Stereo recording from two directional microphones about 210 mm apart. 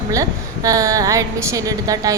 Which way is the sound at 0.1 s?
15° right (ahead or behind).